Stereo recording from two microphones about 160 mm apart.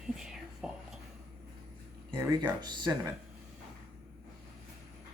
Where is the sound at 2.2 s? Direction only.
20° right (ahead or behind).